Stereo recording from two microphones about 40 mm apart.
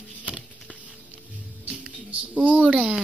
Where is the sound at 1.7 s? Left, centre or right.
Right.